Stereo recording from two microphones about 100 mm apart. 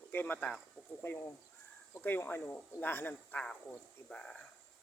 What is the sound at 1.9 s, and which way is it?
Speech, 20° left (ahead or behind).